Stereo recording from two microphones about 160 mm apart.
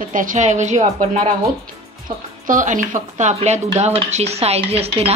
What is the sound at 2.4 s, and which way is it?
Speech, 55° right (ahead or behind).